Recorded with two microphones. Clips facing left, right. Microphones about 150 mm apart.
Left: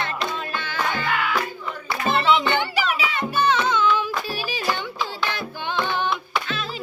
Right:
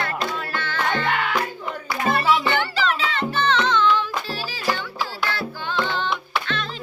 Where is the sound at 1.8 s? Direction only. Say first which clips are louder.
Even; 25° left (ahead or behind).